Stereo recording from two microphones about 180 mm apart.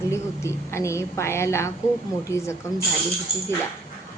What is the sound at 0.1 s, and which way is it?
A woman's voice, 15° left (ahead or behind).